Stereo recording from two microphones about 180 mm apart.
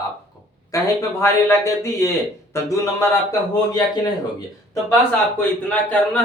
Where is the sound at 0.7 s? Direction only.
15° left (ahead or behind).